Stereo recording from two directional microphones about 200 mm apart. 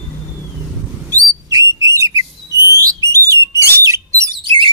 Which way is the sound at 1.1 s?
15° right (ahead or behind).